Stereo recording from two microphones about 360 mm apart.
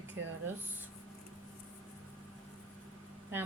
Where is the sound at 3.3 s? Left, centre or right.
Centre.